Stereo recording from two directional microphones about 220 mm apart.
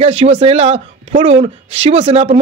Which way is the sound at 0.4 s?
25° right (ahead or behind).